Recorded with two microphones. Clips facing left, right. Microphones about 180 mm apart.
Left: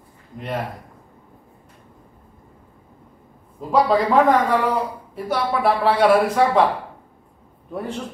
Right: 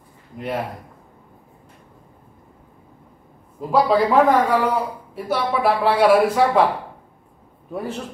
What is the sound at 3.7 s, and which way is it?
A man's voice, centre (ahead or behind).